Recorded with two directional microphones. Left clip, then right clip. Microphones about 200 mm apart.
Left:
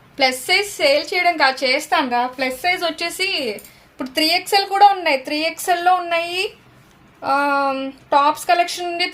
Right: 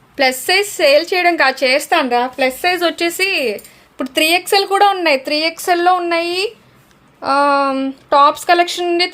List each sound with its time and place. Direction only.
0.2 s a woman's voice: 30° right (ahead or behind)